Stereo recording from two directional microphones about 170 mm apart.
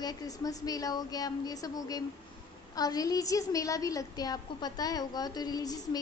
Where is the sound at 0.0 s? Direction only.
20° left (ahead or behind).